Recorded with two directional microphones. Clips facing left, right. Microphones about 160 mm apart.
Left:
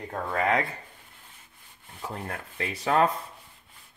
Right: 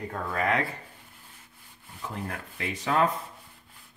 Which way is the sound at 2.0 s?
35° left (ahead or behind).